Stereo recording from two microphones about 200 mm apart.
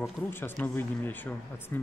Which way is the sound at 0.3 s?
10° left (ahead or behind).